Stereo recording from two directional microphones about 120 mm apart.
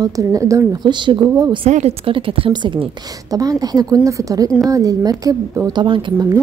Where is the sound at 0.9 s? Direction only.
40° right (ahead or behind).